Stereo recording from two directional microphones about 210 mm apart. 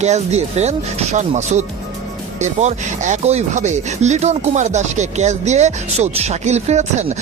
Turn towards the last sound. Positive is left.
turn(degrees=-30)  # may be behind; listen again after turning